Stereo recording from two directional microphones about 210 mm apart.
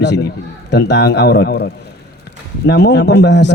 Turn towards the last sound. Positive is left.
turn(degrees=55)  # may be behind; listen again after turning